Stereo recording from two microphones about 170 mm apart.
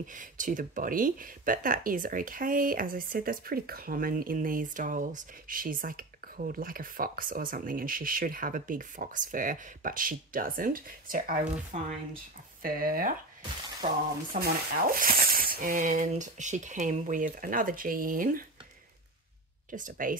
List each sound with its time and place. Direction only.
0.0 s speech: 50° right (ahead or behind)
11.7 s speech: 40° right (ahead or behind)
12.6 s speech: 55° right (ahead or behind)
13.8 s speech: 45° right (ahead or behind)
14.3 s speech: 60° right (ahead or behind)
19.7 s speech: 50° right (ahead or behind)